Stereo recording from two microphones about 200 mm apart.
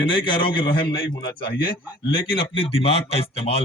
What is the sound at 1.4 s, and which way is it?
Speech, 50° left (ahead or behind).